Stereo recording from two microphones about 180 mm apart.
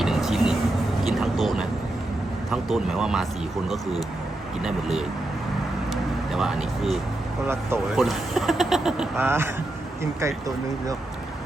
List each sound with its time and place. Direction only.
0.0 s vehicle: centre (ahead or behind)
1.0 s a sound: centre (ahead or behind)
2.5 s speech: centre (ahead or behind)
4.6 s speech: centre (ahead or behind)
5.9 s vehicle: centre (ahead or behind)
7.4 s speech: 15° right (ahead or behind)
7.9 s speech: centre (ahead or behind); by 10.9 s 15° right (ahead or behind)